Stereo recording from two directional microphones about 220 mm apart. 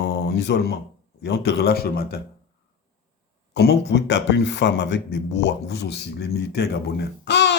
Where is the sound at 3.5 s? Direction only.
45° left (ahead or behind).